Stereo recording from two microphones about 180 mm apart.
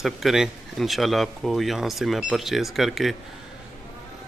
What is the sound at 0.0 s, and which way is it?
Speech, centre (ahead or behind).